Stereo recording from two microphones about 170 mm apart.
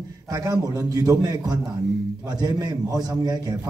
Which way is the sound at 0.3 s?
20° right (ahead or behind).